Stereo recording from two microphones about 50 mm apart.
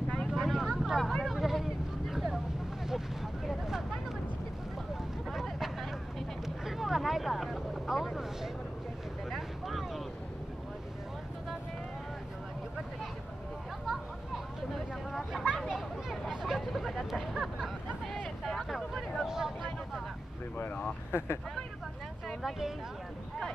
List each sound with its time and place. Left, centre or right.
0.3 s vehicle: centre
0.7 s a sound: centre
1.2 s vehicle: centre
5.3 s vehicle: centre
13.8 s a sound: centre
15.7 s vehicle: centre
19.2 s vehicle: centre
21.1 s vehicle: left